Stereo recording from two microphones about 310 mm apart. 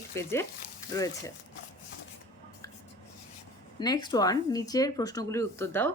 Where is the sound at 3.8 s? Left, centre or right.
Centre.